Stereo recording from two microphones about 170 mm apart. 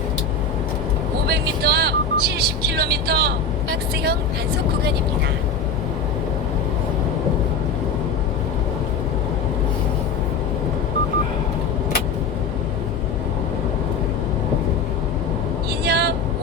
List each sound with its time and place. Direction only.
1.3 s vehicle: 70° right (ahead or behind)
15.8 s vehicle: 70° right (ahead or behind)